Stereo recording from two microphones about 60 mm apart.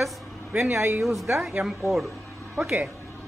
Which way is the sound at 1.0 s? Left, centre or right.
Centre.